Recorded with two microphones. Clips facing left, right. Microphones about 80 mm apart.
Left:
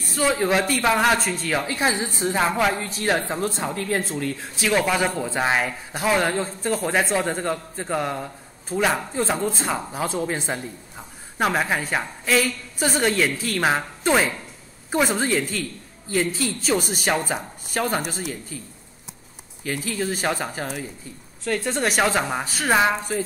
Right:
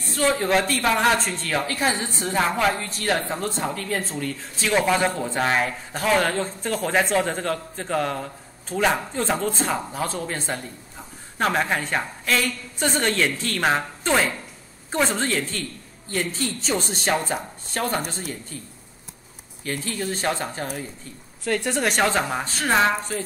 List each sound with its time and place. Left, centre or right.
0.1 s a woman's voice: centre
1.7 s a woman's voice: centre
5.3 s a woman's voice: centre
10.1 s a woman's voice: centre
19.7 s a woman's voice: centre
21.5 s speech: centre